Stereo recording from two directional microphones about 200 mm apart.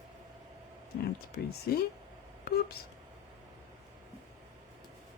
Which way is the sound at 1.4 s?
55° left (ahead or behind).